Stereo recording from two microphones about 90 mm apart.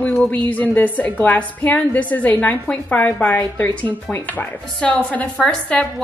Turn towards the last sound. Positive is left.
turn(degrees=15)  # may be behind; listen again after turning